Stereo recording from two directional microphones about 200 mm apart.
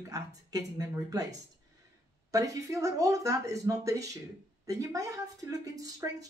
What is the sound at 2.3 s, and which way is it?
Speech, 15° right (ahead or behind).